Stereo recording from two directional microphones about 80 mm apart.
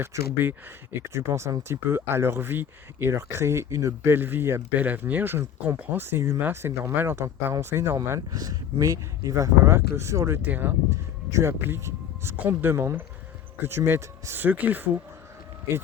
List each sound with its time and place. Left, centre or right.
0.0 s speech: right
4.1 s speech: right
7.9 s speech: right